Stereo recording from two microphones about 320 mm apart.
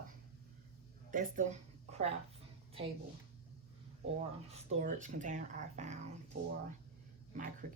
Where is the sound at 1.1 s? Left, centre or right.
Right.